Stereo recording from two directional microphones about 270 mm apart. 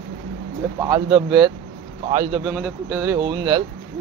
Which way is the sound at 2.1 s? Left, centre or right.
Right.